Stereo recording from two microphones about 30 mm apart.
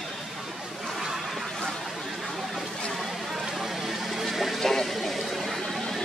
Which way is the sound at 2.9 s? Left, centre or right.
Centre.